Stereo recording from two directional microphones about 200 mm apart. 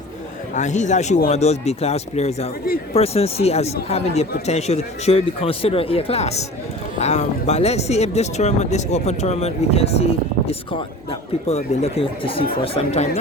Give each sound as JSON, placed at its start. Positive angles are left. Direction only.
{"t": 0.5, "sound": "speech", "side_deg": 35}